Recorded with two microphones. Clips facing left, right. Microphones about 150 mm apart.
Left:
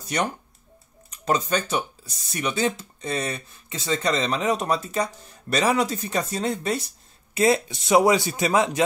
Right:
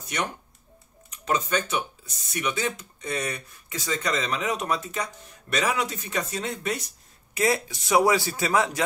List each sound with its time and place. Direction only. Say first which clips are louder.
0.0 s speech: left 4 dB; 35° left (ahead or behind)